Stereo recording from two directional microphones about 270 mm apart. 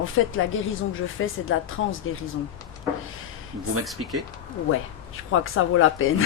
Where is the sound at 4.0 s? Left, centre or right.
Right.